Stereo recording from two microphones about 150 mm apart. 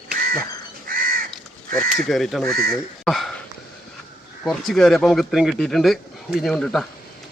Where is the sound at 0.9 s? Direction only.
70° right (ahead or behind).